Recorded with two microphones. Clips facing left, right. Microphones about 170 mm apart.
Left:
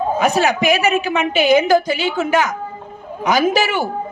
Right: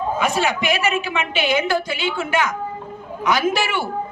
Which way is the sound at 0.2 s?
45° left (ahead or behind).